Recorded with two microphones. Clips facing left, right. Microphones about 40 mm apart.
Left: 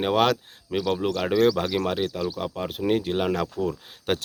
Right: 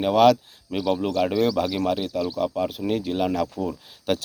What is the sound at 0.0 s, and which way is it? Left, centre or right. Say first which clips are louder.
Speech: right 5 dB; left.